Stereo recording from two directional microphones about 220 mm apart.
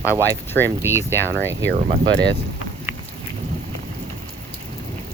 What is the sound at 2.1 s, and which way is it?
Speech, 50° right (ahead or behind).